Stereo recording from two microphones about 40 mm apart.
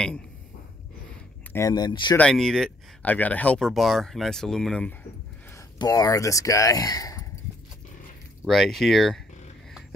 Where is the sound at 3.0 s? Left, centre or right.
Left.